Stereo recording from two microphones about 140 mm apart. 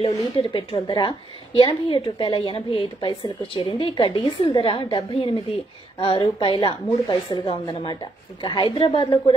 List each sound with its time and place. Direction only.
0.0 s a woman's voice: 40° left (ahead or behind)